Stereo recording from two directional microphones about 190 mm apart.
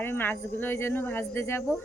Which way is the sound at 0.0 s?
10° left (ahead or behind).